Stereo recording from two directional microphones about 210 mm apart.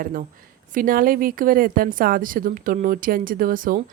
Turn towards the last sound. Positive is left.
turn(degrees=-40)  # may be behind; listen again after turning